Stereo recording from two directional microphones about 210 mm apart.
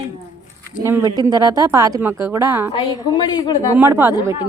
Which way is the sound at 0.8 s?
15° right (ahead or behind).